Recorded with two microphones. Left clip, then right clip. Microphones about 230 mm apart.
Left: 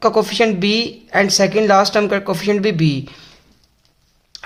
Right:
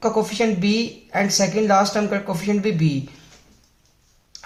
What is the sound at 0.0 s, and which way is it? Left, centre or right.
Speech, left.